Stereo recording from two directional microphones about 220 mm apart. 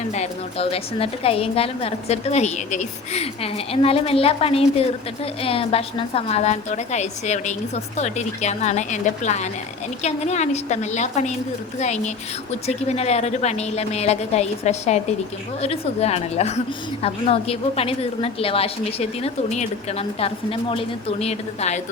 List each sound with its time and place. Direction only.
0.1 s a woman's voice: 30° left (ahead or behind)